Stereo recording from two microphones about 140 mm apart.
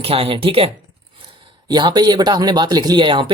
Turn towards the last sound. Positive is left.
turn(degrees=-35)  # may be behind; listen again after turning